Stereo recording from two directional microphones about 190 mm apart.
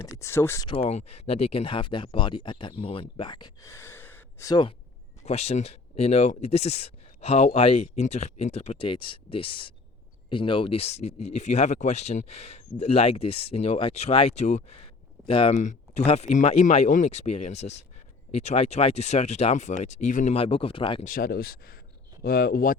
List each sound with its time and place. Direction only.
0.2 s speech: 15° left (ahead or behind)
0.7 s speech: 30° left (ahead or behind)
5.2 s speech: 35° left (ahead or behind)
21.0 s speech: 50° left (ahead or behind)